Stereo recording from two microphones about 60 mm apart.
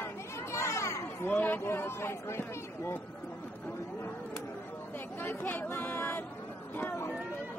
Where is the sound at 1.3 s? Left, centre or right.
Left.